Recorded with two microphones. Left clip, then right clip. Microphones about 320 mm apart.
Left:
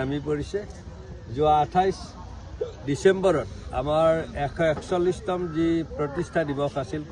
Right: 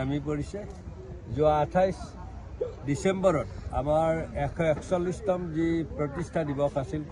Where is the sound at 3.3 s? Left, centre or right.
Centre.